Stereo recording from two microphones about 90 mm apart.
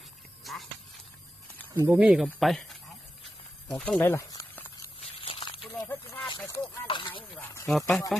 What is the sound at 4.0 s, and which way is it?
Speech, 25° left (ahead or behind).